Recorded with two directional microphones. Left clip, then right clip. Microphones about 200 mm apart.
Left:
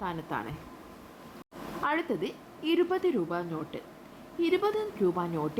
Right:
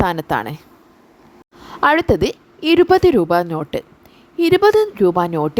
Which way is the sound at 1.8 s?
50° right (ahead or behind).